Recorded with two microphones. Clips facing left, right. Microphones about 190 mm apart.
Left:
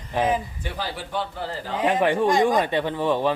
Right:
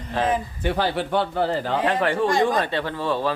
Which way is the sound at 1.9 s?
15° left (ahead or behind).